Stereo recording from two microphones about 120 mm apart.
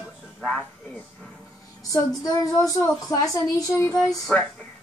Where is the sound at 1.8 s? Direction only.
30° left (ahead or behind).